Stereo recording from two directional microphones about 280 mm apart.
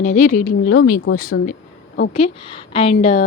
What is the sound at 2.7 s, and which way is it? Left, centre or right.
Speech, left.